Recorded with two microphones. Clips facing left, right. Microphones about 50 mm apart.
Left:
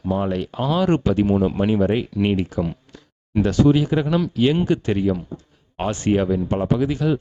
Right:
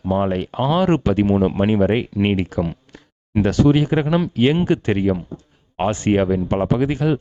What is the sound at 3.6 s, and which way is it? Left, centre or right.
Speech, right.